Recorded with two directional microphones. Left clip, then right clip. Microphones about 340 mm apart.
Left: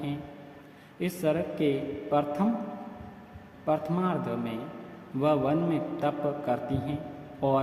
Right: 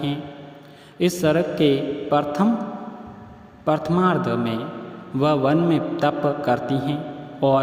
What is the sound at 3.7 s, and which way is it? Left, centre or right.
A man's voice, right.